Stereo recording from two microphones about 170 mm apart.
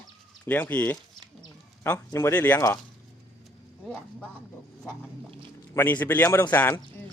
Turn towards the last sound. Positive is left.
turn(degrees=10)  # may be behind; listen again after turning